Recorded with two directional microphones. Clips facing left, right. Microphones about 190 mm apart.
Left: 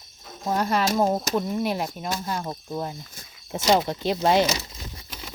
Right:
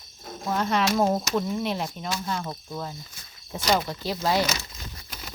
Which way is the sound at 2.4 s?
25° left (ahead or behind).